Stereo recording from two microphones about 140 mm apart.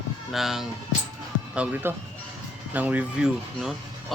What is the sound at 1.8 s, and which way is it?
Speech, 15° right (ahead or behind).